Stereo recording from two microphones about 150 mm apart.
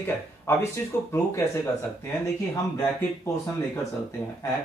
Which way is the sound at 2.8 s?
20° left (ahead or behind).